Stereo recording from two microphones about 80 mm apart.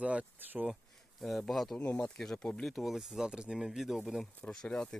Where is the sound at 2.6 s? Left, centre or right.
Centre.